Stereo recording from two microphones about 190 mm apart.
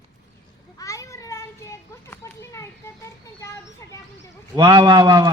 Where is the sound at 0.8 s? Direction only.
15° left (ahead or behind).